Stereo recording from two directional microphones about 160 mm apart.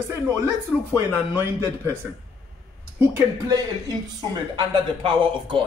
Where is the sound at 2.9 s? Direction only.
15° right (ahead or behind).